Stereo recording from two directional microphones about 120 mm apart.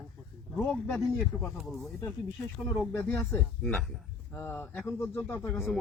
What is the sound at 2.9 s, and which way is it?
Speech, 20° left (ahead or behind).